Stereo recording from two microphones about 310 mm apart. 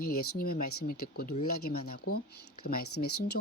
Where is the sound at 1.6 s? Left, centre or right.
Left.